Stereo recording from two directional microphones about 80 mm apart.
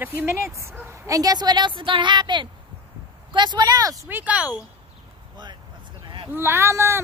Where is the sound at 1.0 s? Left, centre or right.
Right.